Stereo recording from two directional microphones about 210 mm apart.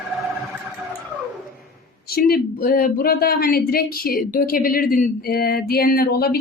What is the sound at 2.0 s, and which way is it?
Speech, 45° left (ahead or behind).